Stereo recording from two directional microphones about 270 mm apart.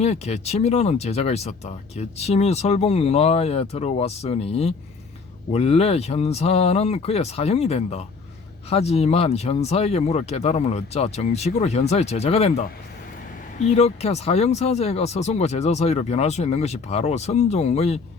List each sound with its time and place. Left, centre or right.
0.0 s speech: left